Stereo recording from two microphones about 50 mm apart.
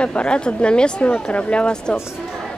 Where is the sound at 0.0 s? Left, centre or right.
Left.